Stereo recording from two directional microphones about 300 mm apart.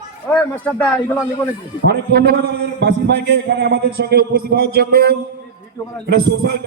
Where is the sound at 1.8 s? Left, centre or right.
Right.